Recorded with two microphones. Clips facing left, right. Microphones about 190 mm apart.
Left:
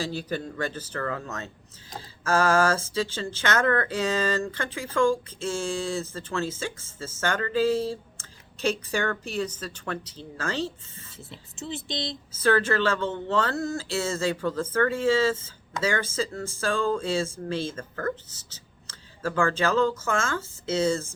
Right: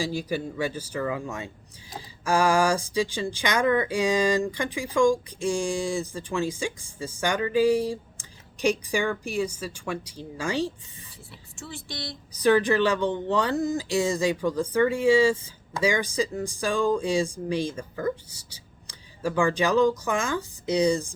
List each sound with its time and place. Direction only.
0.0 s speech: 10° right (ahead or behind)
11.3 s speech: 20° left (ahead or behind)
12.3 s speech: 15° right (ahead or behind)